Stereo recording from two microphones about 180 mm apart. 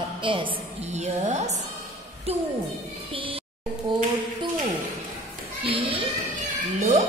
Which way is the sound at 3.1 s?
30° right (ahead or behind).